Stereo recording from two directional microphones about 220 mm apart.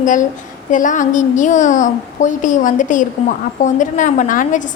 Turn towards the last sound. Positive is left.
turn(degrees=35)  # may be behind; listen again after turning